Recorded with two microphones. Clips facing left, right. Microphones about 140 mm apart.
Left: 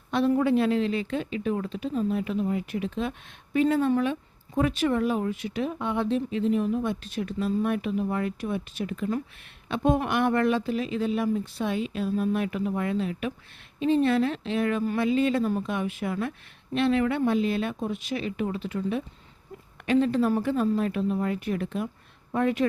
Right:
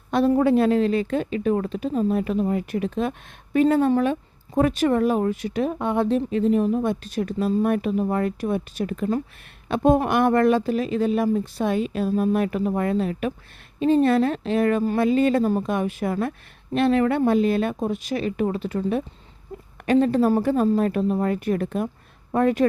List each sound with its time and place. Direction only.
0.1 s a woman's voice: 40° right (ahead or behind)